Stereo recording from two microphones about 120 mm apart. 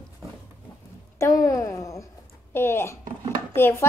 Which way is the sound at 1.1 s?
25° left (ahead or behind).